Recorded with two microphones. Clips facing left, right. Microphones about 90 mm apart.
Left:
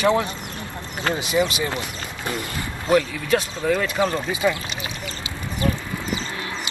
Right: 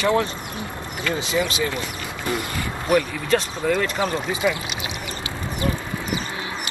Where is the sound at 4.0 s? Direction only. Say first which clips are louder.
Left 2 dB; 10° right (ahead or behind).